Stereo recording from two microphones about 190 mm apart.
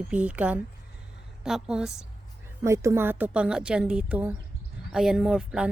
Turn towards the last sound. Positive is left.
turn(degrees=-5)  # may be behind; listen again after turning